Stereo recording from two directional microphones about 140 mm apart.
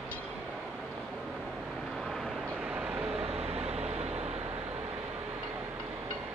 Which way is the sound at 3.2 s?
45° right (ahead or behind).